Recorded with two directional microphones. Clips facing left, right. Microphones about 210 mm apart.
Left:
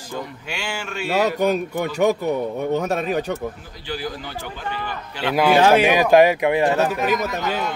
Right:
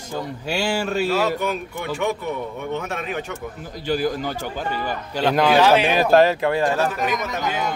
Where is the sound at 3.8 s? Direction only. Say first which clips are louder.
Right 7 dB; 45° right (ahead or behind).